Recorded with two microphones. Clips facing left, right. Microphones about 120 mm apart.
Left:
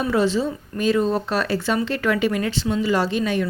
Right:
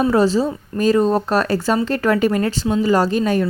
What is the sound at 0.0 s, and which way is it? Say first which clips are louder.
Speech: right 5 dB; 40° right (ahead or behind).